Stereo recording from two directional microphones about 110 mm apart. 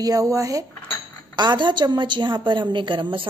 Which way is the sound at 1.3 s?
45° right (ahead or behind).